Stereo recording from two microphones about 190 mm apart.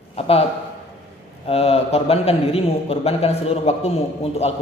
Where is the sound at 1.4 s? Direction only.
30° left (ahead or behind).